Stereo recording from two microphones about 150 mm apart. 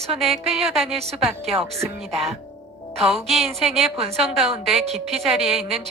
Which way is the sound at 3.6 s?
Centre (ahead or behind).